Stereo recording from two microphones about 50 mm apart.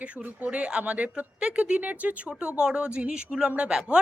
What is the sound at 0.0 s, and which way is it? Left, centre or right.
Speech, right.